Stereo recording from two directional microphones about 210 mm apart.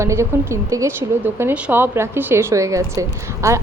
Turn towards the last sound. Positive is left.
turn(degrees=-15)  # may be behind; listen again after turning